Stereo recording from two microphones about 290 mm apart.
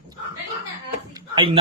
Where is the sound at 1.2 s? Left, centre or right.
Centre.